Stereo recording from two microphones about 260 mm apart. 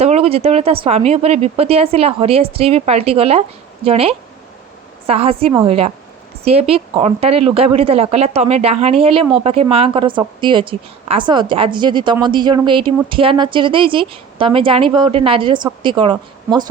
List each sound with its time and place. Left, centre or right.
0.0 s a woman's voice: right